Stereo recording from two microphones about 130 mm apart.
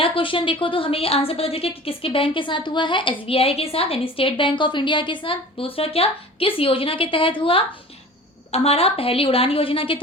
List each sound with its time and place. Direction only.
0.0 s a woman's voice: 40° left (ahead or behind)